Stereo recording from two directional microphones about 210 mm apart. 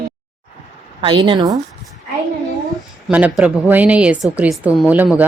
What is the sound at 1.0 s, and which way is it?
Speech, 25° right (ahead or behind).